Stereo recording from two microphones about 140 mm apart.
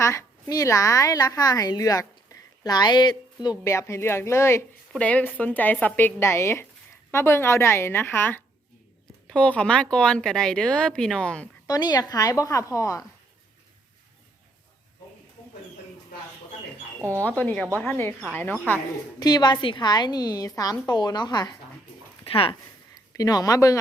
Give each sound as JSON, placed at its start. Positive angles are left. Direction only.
{"t": 0.0, "sound": "a woman's voice", "side_deg": 20}
{"t": 11.6, "sound": "a woman's voice", "side_deg": 30}
{"t": 17.2, "sound": "speech", "side_deg": 10}
{"t": 19.2, "sound": "a woman's voice", "side_deg": 30}
{"t": 22.2, "sound": "speech", "side_deg": 40}
{"t": 23.1, "sound": "a woman's voice", "side_deg": 25}